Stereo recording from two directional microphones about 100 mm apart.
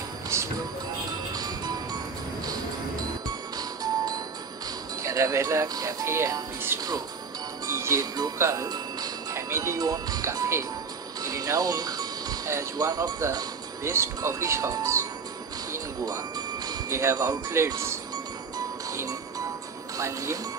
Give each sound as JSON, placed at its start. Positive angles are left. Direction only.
{"t": 0.3, "sound": "music", "side_deg": -30}
{"t": 1.3, "sound": "music", "side_deg": -40}
{"t": 3.3, "sound": "music", "side_deg": -40}
{"t": 5.0, "sound": "speech", "side_deg": -30}
{"t": 11.2, "sound": "music", "side_deg": -35}
{"t": 12.7, "sound": "speech", "side_deg": -40}
{"t": 13.8, "sound": "speech", "side_deg": -30}
{"t": 15.7, "sound": "jingle bell", "side_deg": -40}
{"t": 16.9, "sound": "speech", "side_deg": -30}
{"t": 18.9, "sound": "music", "side_deg": -35}
{"t": 20.0, "sound": "speech", "side_deg": -30}